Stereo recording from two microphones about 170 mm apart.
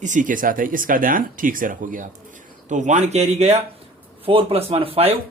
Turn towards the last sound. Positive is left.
turn(degrees=-35)  # may be behind; listen again after turning